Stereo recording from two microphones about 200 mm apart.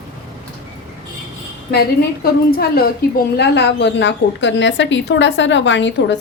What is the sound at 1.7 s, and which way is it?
A woman's voice, 50° left (ahead or behind).